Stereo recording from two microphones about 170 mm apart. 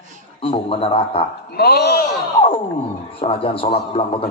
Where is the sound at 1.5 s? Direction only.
70° left (ahead or behind).